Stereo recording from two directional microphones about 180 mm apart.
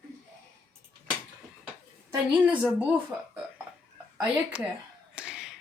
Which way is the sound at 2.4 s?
5° right (ahead or behind).